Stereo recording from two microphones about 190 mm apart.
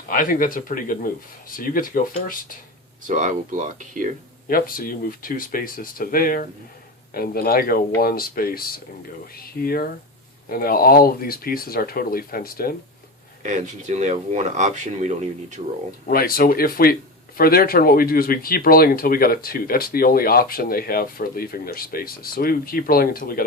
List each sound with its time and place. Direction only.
0.1 s speech: 45° left (ahead or behind)
3.1 s speech: 40° right (ahead or behind)
4.4 s speech: 50° left (ahead or behind)
13.4 s speech: 40° right (ahead or behind)
16.0 s speech: 50° left (ahead or behind)